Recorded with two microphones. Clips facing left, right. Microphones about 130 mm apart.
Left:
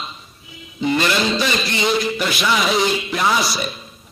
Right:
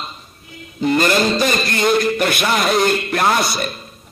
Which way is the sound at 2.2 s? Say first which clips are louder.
Right 2 dB; 55° right (ahead or behind).